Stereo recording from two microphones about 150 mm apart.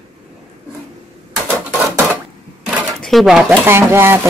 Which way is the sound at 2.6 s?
Centre (ahead or behind).